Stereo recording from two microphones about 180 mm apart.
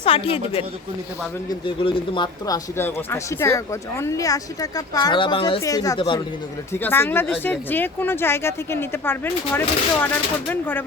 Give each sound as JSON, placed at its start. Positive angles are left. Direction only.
{"t": 0.0, "sound": "a woman's voice", "side_deg": 30}
{"t": 2.7, "sound": "speech", "side_deg": 15}
{"t": 6.7, "sound": "speech", "side_deg": 10}